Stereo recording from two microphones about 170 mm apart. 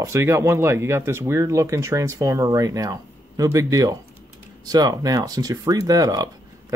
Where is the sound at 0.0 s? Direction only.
15° right (ahead or behind).